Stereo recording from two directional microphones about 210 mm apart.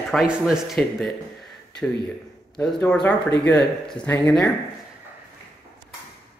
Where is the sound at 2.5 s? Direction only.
5° left (ahead or behind).